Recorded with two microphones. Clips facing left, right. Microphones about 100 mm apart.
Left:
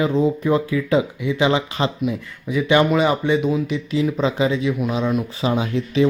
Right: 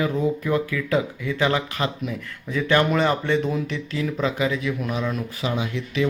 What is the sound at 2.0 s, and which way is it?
Speech, 10° left (ahead or behind).